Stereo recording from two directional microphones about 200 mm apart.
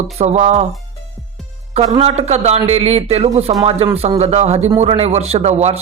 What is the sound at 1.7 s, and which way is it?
Speech, 35° right (ahead or behind).